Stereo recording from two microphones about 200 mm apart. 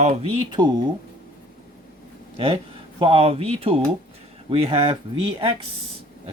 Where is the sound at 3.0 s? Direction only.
30° right (ahead or behind).